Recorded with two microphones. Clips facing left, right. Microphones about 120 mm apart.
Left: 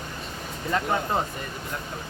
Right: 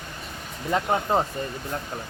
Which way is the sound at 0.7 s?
20° right (ahead or behind).